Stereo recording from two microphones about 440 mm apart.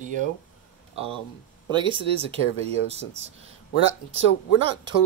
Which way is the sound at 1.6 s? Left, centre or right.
Centre.